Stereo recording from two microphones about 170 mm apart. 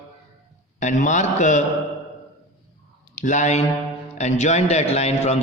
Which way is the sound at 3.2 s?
45° left (ahead or behind).